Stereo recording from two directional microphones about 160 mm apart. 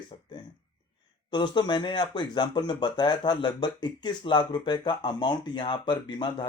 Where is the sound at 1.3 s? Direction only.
30° left (ahead or behind).